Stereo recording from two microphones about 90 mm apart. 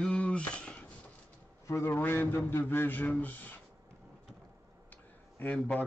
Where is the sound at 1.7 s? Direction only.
25° left (ahead or behind).